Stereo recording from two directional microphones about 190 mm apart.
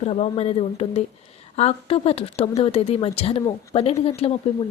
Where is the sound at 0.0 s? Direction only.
35° left (ahead or behind).